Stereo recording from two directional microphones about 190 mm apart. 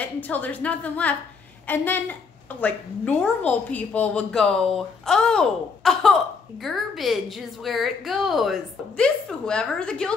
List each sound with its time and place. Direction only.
0.0 s a woman's voice: 10° left (ahead or behind)
3.2 s a woman's voice: 5° left (ahead or behind)